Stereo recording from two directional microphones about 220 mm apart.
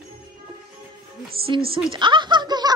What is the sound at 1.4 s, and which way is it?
Speech, 25° right (ahead or behind).